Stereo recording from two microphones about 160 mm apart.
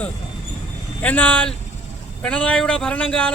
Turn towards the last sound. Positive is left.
turn(degrees=5)  # may be behind; listen again after turning